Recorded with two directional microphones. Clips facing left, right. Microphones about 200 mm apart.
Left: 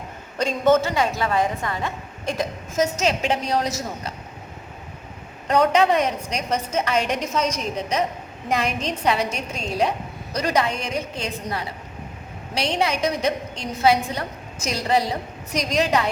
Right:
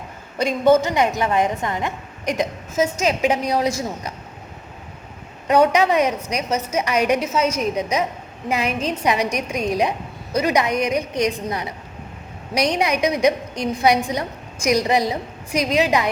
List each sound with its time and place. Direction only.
0.3 s a woman's voice: 10° right (ahead or behind)
5.5 s a woman's voice: 10° right (ahead or behind)